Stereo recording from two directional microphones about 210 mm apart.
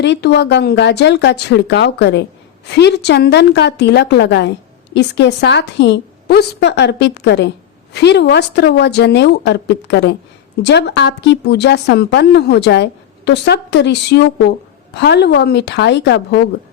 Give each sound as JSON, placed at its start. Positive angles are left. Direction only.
{"t": 0.0, "sound": "a woman's voice", "side_deg": 55}